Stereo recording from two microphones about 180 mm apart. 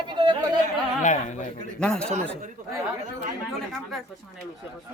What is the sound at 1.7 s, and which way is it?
Speech, 5° left (ahead or behind).